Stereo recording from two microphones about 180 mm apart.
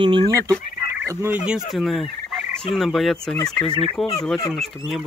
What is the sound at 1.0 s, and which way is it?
Speech, 10° right (ahead or behind).